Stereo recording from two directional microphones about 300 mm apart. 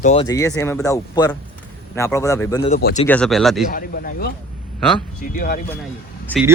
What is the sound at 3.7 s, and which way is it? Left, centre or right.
A man's voice, left.